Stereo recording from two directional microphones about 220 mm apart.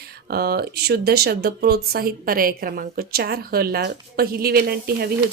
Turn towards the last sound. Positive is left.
turn(degrees=-45)  # may be behind; listen again after turning